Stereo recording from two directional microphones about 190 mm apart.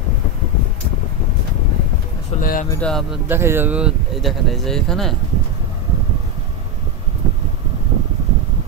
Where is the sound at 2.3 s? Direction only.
45° left (ahead or behind).